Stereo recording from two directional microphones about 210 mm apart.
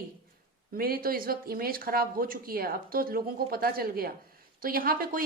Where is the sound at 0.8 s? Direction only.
45° right (ahead or behind).